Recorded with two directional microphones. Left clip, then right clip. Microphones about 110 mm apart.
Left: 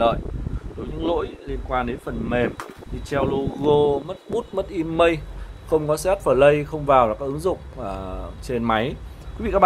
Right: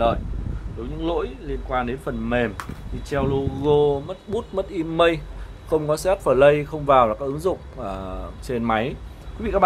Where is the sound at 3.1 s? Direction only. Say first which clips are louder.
Left 1 dB; 15° left (ahead or behind).